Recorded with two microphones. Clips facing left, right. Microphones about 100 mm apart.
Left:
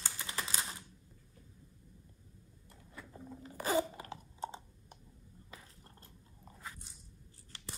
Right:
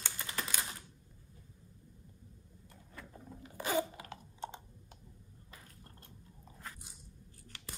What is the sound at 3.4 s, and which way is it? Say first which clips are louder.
Crunch: left 2 dB; 35° left (ahead or behind).